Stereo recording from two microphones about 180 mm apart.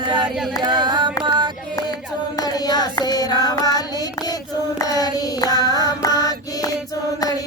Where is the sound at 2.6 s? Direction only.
20° left (ahead or behind).